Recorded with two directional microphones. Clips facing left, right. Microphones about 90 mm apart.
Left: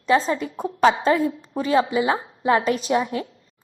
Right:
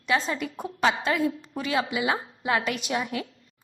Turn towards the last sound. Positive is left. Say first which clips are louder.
# left 7 dB
turn(degrees=30)  # may be behind; listen again after turning